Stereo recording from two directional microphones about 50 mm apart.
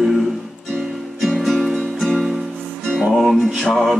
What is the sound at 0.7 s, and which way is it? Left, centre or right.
Music, centre.